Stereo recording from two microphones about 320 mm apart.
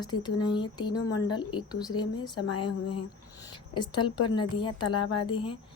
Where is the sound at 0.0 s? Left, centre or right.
Centre.